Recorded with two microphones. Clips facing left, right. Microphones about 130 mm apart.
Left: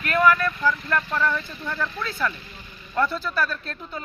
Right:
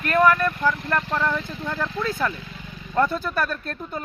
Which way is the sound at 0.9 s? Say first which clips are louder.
Even; 25° right (ahead or behind).